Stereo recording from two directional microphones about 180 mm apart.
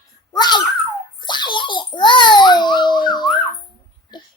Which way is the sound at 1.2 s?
25° left (ahead or behind).